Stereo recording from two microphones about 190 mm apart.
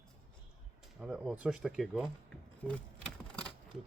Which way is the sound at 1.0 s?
5° right (ahead or behind).